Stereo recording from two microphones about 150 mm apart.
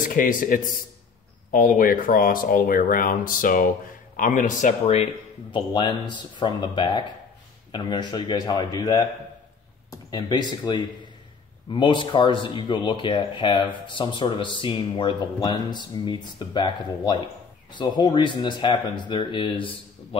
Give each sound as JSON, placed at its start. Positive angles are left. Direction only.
{"t": 0.1, "sound": "speech", "side_deg": 65}
{"t": 5.5, "sound": "speech", "side_deg": 30}
{"t": 9.8, "sound": "a sound", "side_deg": 30}
{"t": 10.6, "sound": "speech", "side_deg": 30}